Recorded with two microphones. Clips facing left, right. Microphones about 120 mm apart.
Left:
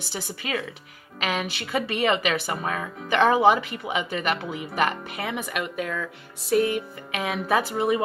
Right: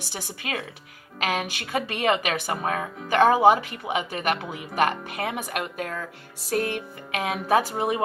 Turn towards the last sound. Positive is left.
turn(degrees=-50)  # may be behind; listen again after turning